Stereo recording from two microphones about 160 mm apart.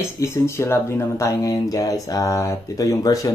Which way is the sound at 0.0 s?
15° left (ahead or behind).